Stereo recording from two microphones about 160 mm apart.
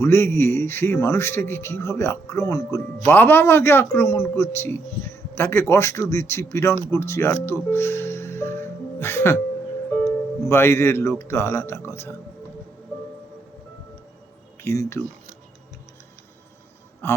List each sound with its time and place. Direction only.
0.0 s a man's voice: 15° left (ahead or behind)
7.4 s music: 15° left (ahead or behind)
10.5 s a man's voice: 15° left (ahead or behind)
14.6 s speech: 15° left (ahead or behind)
17.0 s a man's voice: 15° left (ahead or behind)